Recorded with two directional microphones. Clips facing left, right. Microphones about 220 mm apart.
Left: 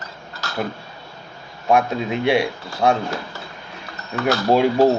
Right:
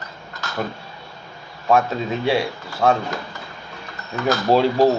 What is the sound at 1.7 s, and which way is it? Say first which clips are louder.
Speech: even; 15° left (ahead or behind).